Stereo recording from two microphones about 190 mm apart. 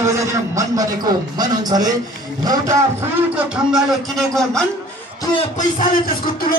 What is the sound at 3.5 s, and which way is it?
Speech, centre (ahead or behind).